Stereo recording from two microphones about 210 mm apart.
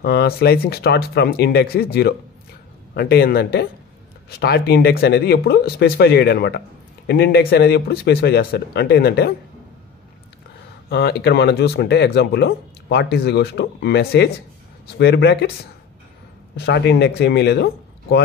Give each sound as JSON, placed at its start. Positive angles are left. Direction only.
{"t": 0.0, "sound": "speech", "side_deg": 50}
{"t": 10.9, "sound": "speech", "side_deg": 50}
{"t": 16.5, "sound": "speech", "side_deg": 55}